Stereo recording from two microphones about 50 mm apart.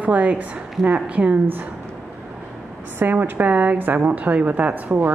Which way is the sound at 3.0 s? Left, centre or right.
Right.